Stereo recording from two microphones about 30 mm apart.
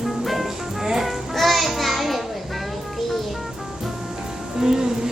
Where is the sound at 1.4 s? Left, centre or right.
Centre.